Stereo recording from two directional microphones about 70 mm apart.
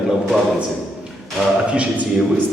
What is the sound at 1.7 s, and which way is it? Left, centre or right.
Speech, centre.